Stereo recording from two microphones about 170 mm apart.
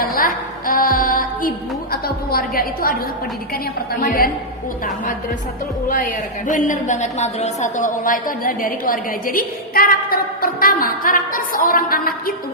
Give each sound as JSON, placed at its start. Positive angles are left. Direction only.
{"t": 0.0, "sound": "music", "side_deg": 55}
{"t": 0.8, "sound": "a woman's voice", "side_deg": 55}
{"t": 5.9, "sound": "a woman's voice", "side_deg": 50}